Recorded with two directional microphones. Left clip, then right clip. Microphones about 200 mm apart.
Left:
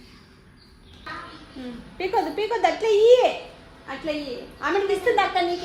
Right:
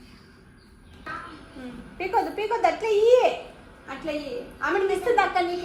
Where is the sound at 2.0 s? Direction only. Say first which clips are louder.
Left 1 dB; 50° left (ahead or behind).